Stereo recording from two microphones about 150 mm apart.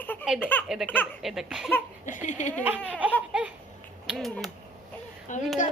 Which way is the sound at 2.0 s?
55° left (ahead or behind).